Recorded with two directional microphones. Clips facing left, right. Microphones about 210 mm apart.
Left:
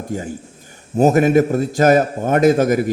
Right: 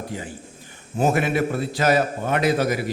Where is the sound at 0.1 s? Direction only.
45° left (ahead or behind).